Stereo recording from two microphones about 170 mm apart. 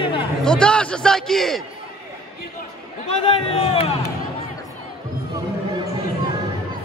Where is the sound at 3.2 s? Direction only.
35° left (ahead or behind).